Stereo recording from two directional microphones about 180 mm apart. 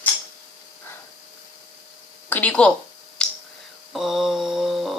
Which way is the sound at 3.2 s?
5° left (ahead or behind).